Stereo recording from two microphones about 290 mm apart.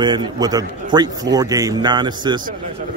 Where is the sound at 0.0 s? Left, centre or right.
Centre.